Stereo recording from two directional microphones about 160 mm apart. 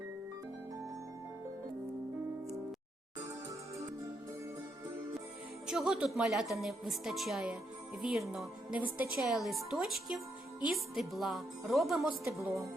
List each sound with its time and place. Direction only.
5.6 s a woman's voice: centre (ahead or behind)
12.4 s speech: 20° right (ahead or behind)